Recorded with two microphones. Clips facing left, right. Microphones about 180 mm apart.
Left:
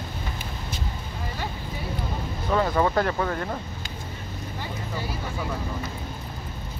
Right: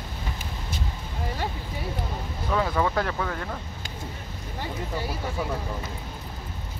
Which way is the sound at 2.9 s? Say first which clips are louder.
Left 3 dB; 5° left (ahead or behind).